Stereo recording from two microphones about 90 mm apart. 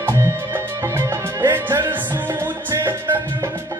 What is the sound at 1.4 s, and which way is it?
Music, 30° right (ahead or behind).